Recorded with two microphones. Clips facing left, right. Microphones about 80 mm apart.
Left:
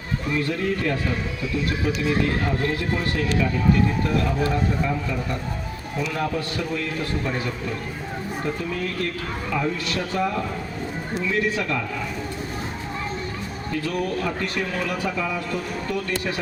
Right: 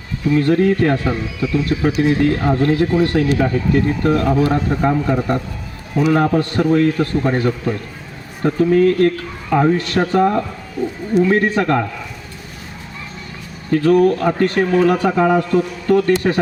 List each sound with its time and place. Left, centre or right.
0.3 s a man's voice: right
13.7 s speech: right